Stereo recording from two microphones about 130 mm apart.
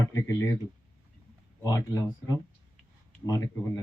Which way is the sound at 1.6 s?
30° left (ahead or behind).